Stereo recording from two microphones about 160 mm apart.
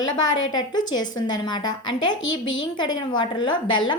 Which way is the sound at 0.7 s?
25° left (ahead or behind).